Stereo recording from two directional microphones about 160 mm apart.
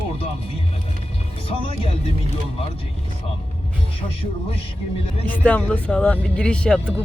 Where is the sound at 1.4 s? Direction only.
35° left (ahead or behind).